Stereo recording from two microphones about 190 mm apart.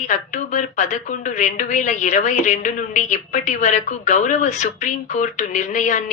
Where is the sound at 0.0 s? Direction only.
40° left (ahead or behind).